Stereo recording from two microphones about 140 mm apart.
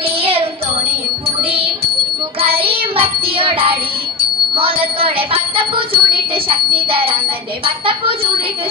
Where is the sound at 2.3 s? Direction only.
40° right (ahead or behind).